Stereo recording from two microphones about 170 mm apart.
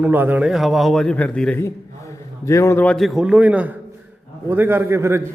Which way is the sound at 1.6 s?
15° left (ahead or behind).